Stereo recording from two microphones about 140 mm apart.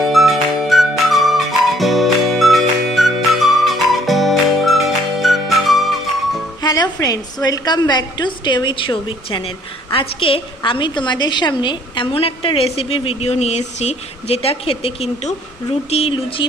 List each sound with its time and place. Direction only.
0.0 s music: centre (ahead or behind)
6.6 s a woman's voice: 30° left (ahead or behind)